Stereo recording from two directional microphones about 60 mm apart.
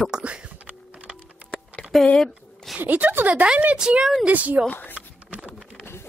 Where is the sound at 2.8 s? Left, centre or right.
Right.